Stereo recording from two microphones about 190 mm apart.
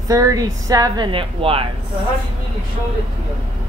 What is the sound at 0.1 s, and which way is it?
A woman's voice, 20° right (ahead or behind).